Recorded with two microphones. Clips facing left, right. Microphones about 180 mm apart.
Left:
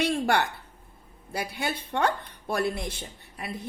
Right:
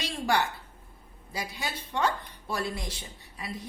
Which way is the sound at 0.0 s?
60° left (ahead or behind).